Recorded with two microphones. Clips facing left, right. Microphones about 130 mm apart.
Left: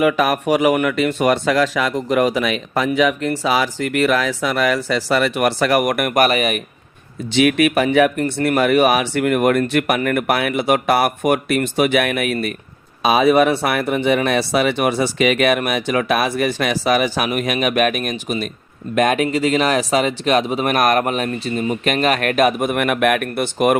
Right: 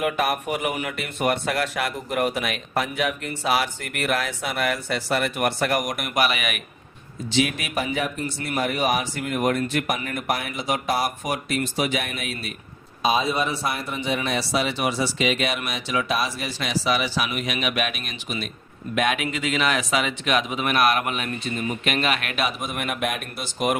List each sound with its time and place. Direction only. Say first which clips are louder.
0.0 s speech: left 7 dB; 90° left; by 6.6 s 40° left (ahead or behind)
7.3 s speech: left 9 dB; 70° left (ahead or behind)
13.0 s speech: left 9 dB; 70° left (ahead or behind)